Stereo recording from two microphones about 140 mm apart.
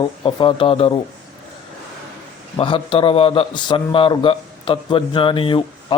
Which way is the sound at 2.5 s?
40° left (ahead or behind).